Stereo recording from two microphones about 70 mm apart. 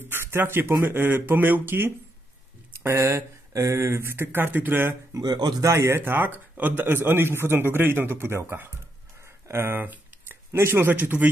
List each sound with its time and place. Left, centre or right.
0.0 s a sound: right
0.8 s a man's voice: right
2.8 s a man's voice: right
5.2 s speech: right
5.6 s a man's voice: right